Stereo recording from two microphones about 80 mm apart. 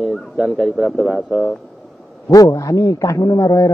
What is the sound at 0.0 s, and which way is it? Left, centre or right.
Speech, centre.